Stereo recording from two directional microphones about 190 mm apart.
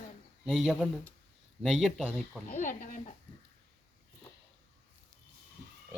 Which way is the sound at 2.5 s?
45° left (ahead or behind).